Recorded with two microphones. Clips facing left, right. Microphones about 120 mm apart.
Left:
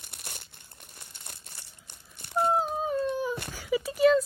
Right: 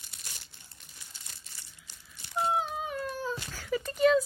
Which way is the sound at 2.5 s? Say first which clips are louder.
Left 4 dB; 35° left (ahead or behind).